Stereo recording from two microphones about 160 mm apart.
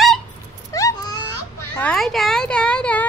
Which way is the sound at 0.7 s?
20° left (ahead or behind).